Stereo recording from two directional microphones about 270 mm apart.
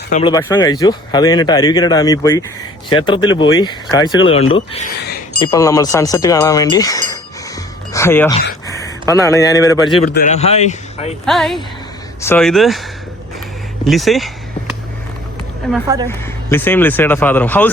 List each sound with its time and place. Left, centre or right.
0.1 s speech: centre
10.2 s speech: left
11.3 s speech: centre
13.8 s speech: centre
15.6 s speech: centre